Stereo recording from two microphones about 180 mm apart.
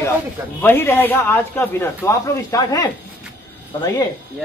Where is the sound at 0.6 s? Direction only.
10° left (ahead or behind).